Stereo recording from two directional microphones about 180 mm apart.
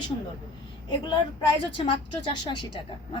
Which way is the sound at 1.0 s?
25° left (ahead or behind).